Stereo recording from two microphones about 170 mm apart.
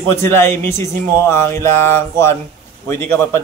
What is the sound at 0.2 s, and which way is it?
A man's voice, 15° left (ahead or behind).